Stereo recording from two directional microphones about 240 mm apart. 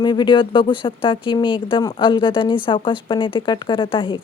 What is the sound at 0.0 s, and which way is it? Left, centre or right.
Speech, centre.